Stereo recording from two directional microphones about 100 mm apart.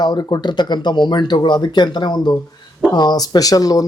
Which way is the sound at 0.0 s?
45° left (ahead or behind).